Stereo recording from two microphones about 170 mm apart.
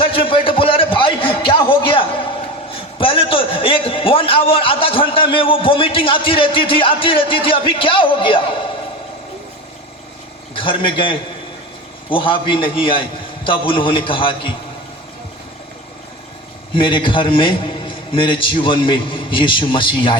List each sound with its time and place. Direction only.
0.0 s a sound: 30° left (ahead or behind)
2.7 s a man's voice: 30° left (ahead or behind)
10.5 s a man's voice: 30° left (ahead or behind)
16.7 s a man's voice: 30° left (ahead or behind)